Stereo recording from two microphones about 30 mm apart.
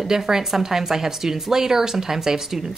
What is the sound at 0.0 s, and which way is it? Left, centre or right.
Speech, centre.